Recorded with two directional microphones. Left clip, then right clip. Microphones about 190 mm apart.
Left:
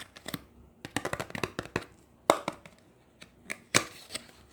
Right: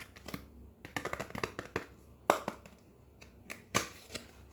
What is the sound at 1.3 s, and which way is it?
Hands, 15° left (ahead or behind).